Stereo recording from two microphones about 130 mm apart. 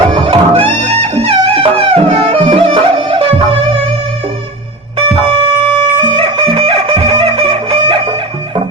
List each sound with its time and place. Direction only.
0.1 s music: 40° right (ahead or behind)
4.9 s music: 45° right (ahead or behind)